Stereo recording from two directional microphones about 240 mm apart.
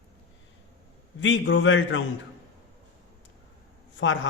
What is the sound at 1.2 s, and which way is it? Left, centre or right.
Speech, left.